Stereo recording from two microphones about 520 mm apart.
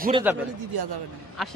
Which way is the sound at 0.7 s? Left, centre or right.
Right.